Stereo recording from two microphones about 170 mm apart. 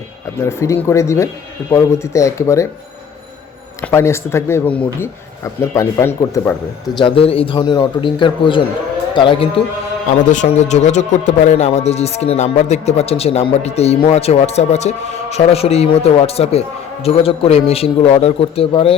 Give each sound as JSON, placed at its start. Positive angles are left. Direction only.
{"t": 0.3, "sound": "speech", "side_deg": 15}
{"t": 3.8, "sound": "speech", "side_deg": 15}
{"t": 6.9, "sound": "a man's voice", "side_deg": 30}
{"t": 10.1, "sound": "speech", "side_deg": 45}